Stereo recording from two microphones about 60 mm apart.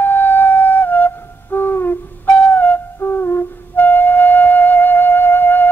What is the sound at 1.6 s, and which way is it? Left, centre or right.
Music, left.